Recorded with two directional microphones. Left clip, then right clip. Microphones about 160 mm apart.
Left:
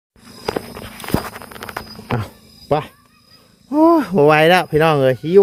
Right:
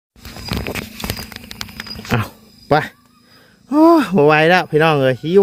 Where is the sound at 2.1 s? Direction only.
15° right (ahead or behind).